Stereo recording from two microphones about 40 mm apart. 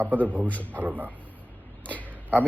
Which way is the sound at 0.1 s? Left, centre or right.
Right.